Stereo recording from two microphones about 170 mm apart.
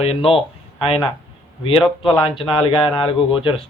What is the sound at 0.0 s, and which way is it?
Speech, 35° left (ahead or behind).